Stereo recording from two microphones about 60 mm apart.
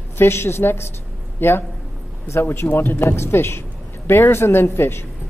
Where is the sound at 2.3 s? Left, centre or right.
Left.